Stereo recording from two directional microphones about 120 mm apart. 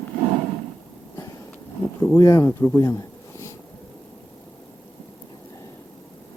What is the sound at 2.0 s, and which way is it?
Speech, 25° left (ahead or behind).